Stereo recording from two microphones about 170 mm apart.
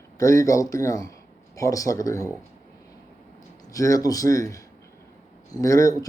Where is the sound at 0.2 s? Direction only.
20° left (ahead or behind).